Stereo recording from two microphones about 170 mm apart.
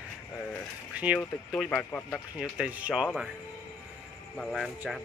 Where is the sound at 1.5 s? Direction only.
5° left (ahead or behind).